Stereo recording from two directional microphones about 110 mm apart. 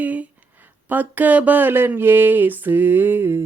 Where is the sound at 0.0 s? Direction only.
15° right (ahead or behind).